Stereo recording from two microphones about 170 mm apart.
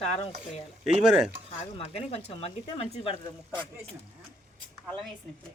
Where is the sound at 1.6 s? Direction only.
35° left (ahead or behind).